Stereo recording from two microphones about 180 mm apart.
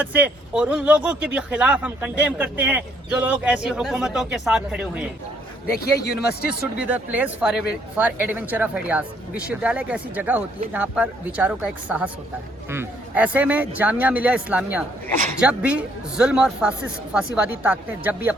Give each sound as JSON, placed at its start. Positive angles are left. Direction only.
{"t": 0.0, "sound": "speech", "side_deg": -10}
{"t": 6.0, "sound": "speech", "side_deg": 60}
{"t": 6.5, "sound": "speech", "side_deg": -10}